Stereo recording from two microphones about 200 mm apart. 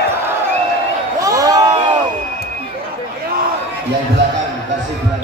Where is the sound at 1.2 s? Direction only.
15° right (ahead or behind).